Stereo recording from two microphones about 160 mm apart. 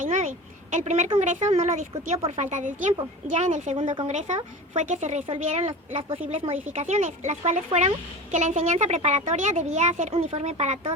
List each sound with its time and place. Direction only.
0.0 s a sound: 55° right (ahead or behind)
0.7 s a woman's voice: 50° right (ahead or behind)
3.8 s speech: 35° right (ahead or behind)
4.1 s a woman's voice: 45° right (ahead or behind)